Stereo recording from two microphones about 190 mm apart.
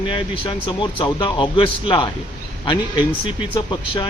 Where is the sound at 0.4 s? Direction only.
25° left (ahead or behind).